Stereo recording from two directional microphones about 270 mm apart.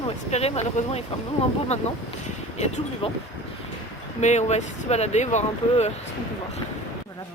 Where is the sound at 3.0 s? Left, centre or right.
Left.